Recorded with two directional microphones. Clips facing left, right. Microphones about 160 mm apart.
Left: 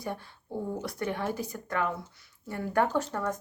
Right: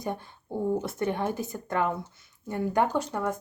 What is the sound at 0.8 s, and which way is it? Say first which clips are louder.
Speech: right 4 dB; 20° right (ahead or behind).